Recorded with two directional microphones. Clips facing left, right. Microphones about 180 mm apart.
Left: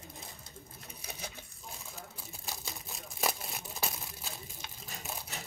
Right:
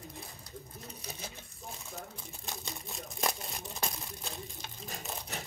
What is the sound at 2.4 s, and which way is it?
Crumpling, centre (ahead or behind).